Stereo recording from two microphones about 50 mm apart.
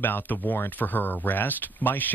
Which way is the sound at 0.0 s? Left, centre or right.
Left.